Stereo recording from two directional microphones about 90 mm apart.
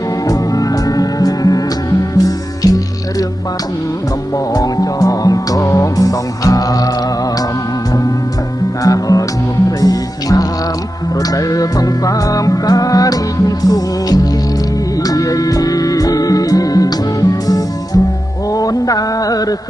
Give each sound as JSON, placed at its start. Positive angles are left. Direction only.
{"t": 0.3, "sound": "music", "side_deg": 40}
{"t": 4.5, "sound": "music", "side_deg": 45}
{"t": 8.8, "sound": "music", "side_deg": 40}
{"t": 18.5, "sound": "a sound", "side_deg": 40}